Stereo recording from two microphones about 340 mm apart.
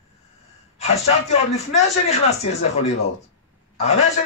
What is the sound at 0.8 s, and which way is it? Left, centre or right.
Speech, centre.